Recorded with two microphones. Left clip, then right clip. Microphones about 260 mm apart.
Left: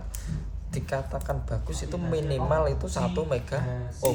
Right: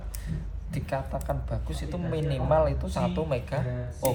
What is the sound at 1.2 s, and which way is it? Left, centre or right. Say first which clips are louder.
Speech: even; left.